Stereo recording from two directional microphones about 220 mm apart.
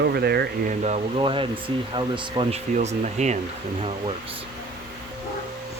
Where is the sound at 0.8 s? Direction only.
25° right (ahead or behind).